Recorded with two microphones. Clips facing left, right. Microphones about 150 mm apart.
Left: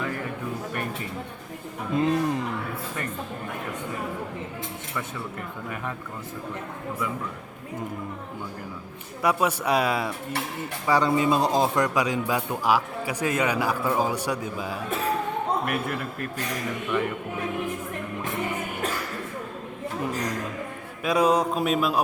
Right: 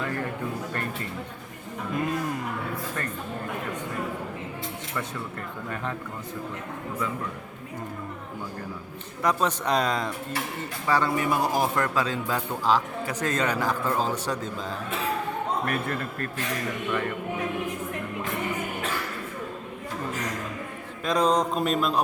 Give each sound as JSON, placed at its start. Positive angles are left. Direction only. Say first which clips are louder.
{"t": 2.0, "sound": "speech", "louder": "left 5 dB", "side_deg": 25}
{"t": 9.2, "sound": "speech", "louder": "left 1 dB", "side_deg": 10}
{"t": 21.0, "sound": "speech", "louder": "left 2 dB", "side_deg": 10}